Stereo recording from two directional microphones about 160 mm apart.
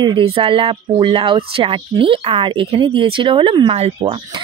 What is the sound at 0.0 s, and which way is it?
Speech, 30° right (ahead or behind).